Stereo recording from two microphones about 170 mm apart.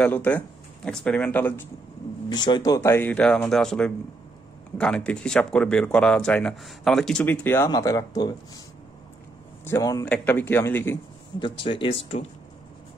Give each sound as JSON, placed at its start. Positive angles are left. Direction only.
{"t": 0.0, "sound": "speech", "side_deg": 10}
{"t": 2.2, "sound": "speech", "side_deg": 25}
{"t": 9.7, "sound": "a man's voice", "side_deg": 20}
{"t": 11.3, "sound": "speech", "side_deg": 30}